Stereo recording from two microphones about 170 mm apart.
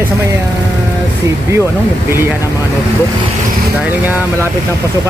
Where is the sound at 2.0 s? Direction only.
15° right (ahead or behind).